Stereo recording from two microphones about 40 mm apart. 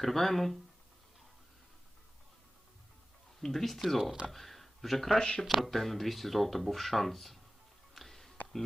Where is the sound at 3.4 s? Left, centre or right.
Centre.